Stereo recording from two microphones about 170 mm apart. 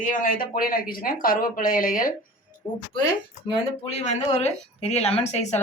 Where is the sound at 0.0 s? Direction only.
50° left (ahead or behind).